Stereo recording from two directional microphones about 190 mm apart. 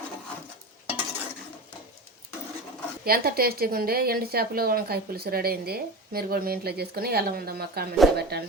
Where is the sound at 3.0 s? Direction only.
50° right (ahead or behind).